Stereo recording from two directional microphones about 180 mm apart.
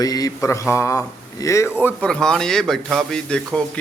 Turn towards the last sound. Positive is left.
turn(degrees=5)  # may be behind; listen again after turning